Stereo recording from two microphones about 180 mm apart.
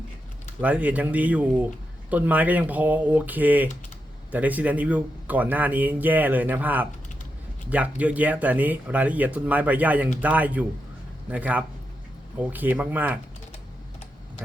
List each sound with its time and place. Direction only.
0.6 s speech: 10° right (ahead or behind)